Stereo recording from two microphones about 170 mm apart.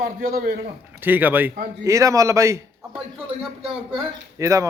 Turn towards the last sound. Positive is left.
turn(degrees=-20)  # may be behind; listen again after turning